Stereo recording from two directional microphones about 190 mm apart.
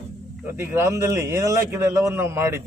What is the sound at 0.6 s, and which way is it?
Speech, 15° right (ahead or behind).